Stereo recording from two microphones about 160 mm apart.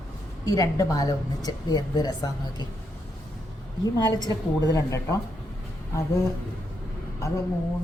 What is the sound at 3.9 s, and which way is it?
A woman's voice, 25° left (ahead or behind).